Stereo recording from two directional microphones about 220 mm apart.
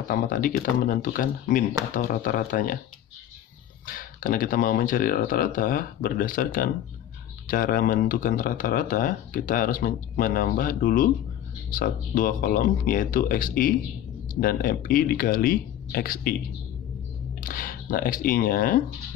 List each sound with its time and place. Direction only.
0.1 s speech: 40° left (ahead or behind)
3.8 s speech: 40° left (ahead or behind)
17.4 s speech: 40° left (ahead or behind)